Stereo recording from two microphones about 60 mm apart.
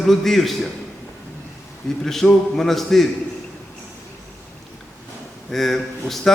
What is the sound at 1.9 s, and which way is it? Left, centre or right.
Speech, centre.